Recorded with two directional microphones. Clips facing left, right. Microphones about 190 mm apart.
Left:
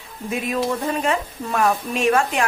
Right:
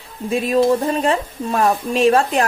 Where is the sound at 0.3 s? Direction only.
35° right (ahead or behind).